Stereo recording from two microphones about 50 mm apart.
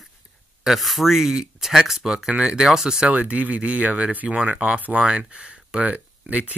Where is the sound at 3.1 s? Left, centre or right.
Right.